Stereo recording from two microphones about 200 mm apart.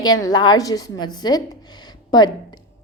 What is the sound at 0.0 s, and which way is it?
A woman's voice, 20° left (ahead or behind).